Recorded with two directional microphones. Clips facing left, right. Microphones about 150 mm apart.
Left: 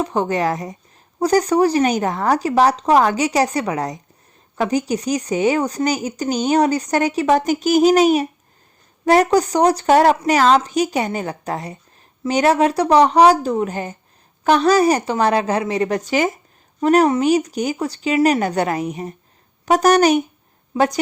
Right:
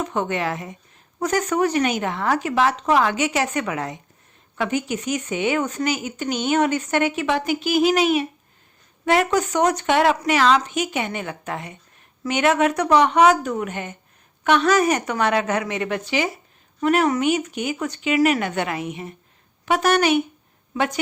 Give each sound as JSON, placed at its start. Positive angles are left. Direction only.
{"t": 0.0, "sound": "speech", "side_deg": 35}